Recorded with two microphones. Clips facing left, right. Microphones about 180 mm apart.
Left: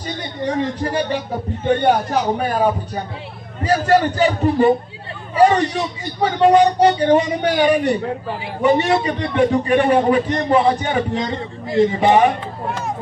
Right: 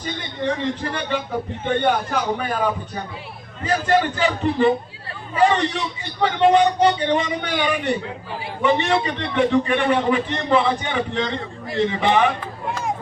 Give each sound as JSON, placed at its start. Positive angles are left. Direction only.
{"t": 0.9, "sound": "a man's voice", "side_deg": 40}